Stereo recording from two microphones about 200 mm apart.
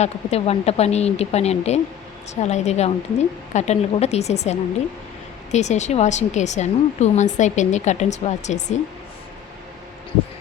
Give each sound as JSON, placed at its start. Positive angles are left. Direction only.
{"t": 0.0, "sound": "speech", "side_deg": 30}